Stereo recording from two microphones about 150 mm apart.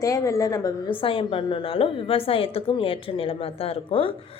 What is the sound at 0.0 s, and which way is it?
Speech, 20° left (ahead or behind).